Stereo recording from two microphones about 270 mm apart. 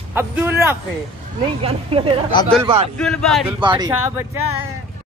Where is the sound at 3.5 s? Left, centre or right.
Centre.